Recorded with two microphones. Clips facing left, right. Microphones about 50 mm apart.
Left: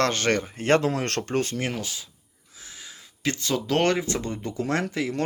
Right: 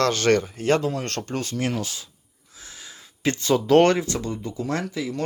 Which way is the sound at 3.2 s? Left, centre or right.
Centre.